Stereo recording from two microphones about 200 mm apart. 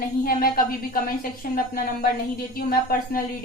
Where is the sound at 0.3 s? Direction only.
45° left (ahead or behind).